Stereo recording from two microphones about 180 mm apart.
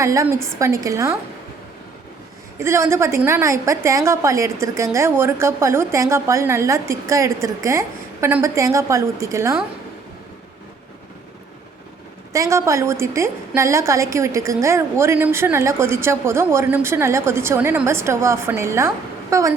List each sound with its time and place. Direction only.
0.0 s a woman's voice: 15° right (ahead or behind)
2.6 s a woman's voice: 15° right (ahead or behind)
12.3 s a woman's voice: 15° right (ahead or behind)